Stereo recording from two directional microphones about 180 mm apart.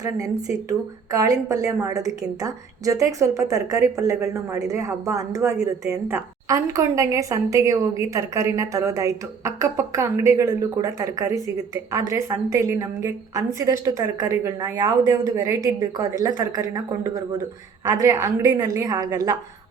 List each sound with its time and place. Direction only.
0.7 s a woman's voice: 20° right (ahead or behind)